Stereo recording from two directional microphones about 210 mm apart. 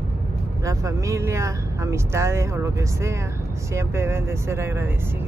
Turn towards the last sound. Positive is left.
turn(degrees=-10)  # may be behind; listen again after turning